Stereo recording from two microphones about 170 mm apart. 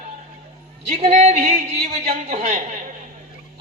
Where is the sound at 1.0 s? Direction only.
40° right (ahead or behind).